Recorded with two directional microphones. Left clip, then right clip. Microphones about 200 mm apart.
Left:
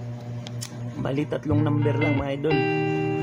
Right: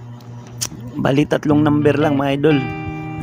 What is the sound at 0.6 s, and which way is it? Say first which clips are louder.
Speech: right 12 dB; 45° right (ahead or behind).